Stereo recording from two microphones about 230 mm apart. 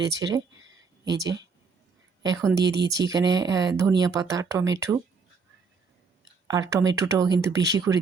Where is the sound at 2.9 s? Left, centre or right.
Centre.